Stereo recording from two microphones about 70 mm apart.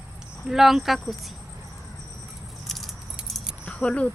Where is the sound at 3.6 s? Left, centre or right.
Centre.